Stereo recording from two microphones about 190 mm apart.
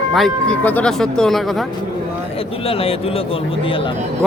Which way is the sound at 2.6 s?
30° left (ahead or behind).